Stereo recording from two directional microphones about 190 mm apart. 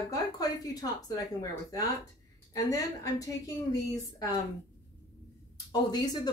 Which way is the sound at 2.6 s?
20° left (ahead or behind).